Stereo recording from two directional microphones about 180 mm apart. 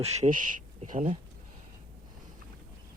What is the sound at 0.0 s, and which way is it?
Speech, 40° right (ahead or behind).